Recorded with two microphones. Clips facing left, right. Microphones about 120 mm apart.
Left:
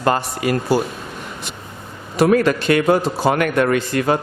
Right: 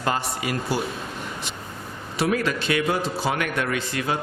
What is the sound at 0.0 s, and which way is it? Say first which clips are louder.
Speech: left 7 dB; 55° left (ahead or behind).